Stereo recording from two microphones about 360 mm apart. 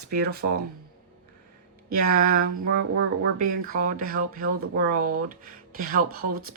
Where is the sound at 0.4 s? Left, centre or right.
Right.